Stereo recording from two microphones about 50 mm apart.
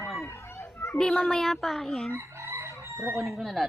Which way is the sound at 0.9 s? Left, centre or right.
Centre.